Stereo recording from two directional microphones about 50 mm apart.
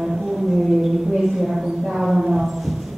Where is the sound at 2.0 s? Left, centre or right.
Centre.